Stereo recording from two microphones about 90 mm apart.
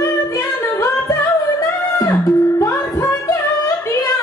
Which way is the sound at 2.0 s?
35° left (ahead or behind).